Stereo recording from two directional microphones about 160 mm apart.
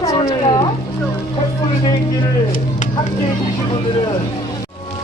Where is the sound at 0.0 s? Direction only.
25° left (ahead or behind).